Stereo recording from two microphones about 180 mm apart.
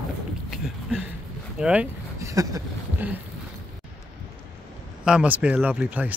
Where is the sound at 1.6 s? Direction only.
5° right (ahead or behind).